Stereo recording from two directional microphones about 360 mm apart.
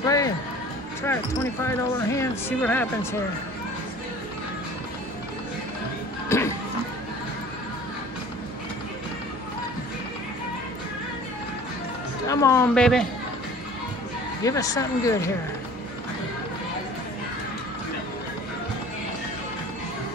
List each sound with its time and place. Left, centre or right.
0.0 s music: centre
1.0 s speech: centre
6.2 s music: centre
12.3 s speech: centre
14.4 s speech: centre